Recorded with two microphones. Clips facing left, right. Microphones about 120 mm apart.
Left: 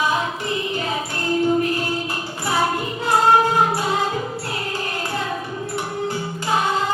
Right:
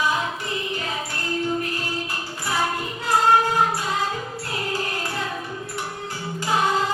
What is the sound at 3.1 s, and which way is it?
Music, 25° left (ahead or behind).